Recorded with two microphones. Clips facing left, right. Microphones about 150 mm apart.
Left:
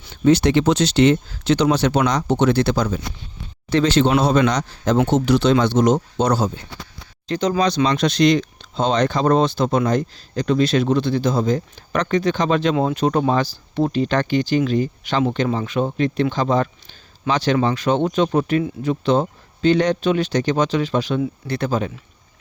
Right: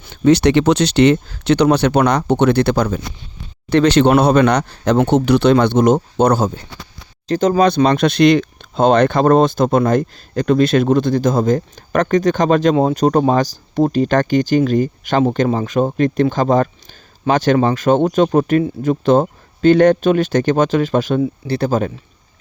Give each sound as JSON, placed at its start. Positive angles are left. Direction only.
{"t": 0.3, "sound": "speech", "side_deg": -70}
{"t": 21.4, "sound": "speech", "side_deg": -35}